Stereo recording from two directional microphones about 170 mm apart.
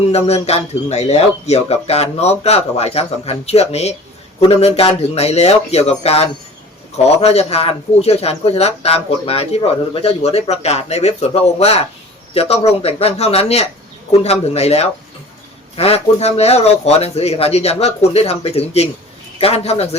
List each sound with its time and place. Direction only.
0.1 s a man's voice: 40° left (ahead or behind)